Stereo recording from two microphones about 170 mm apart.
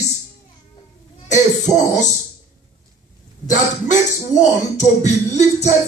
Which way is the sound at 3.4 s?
45° left (ahead or behind).